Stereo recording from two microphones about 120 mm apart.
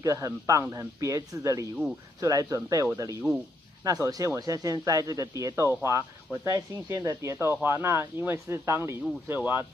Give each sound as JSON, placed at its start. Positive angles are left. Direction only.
{"t": 0.0, "sound": "speech", "side_deg": -30}